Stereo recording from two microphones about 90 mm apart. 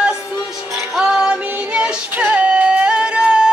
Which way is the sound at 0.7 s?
5° right (ahead or behind).